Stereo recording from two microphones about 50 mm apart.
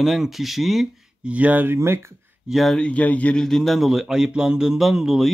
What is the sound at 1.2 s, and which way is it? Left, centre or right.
Speech, right.